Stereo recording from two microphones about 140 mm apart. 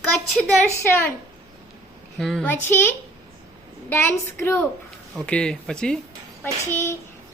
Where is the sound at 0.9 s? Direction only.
15° left (ahead or behind).